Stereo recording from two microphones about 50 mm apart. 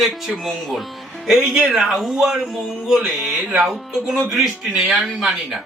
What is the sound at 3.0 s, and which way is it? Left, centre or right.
Music, centre.